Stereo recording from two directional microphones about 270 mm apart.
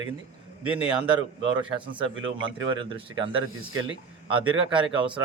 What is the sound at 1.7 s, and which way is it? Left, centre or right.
Speech, centre.